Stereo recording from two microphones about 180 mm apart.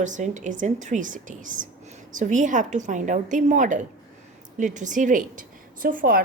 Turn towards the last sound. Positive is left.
turn(degrees=-50)  # may be behind; listen again after turning